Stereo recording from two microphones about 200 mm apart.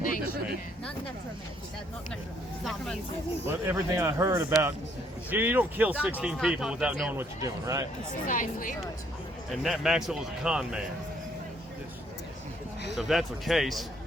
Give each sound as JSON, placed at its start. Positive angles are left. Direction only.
{"t": 2.6, "sound": "speech", "side_deg": 0}
{"t": 3.4, "sound": "speech", "side_deg": -10}
{"t": 8.1, "sound": "speech", "side_deg": 40}
{"t": 9.5, "sound": "speech", "side_deg": 0}
{"t": 13.0, "sound": "speech", "side_deg": 0}